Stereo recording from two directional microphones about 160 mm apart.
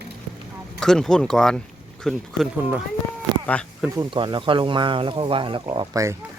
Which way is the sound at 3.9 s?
25° right (ahead or behind).